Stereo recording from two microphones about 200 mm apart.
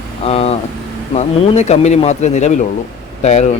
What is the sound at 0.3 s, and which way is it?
Speech, 30° left (ahead or behind).